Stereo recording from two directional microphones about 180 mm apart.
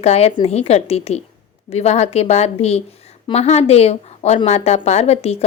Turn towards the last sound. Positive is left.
turn(degrees=35)  # may be behind; listen again after turning